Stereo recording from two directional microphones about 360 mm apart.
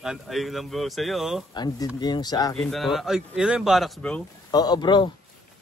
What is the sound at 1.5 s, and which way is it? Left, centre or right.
Speech, centre.